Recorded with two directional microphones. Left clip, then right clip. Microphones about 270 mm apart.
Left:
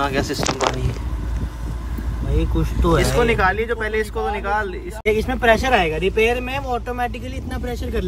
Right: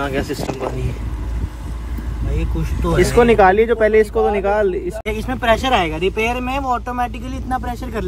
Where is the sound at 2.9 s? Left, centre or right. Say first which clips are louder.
Right 5 dB; centre.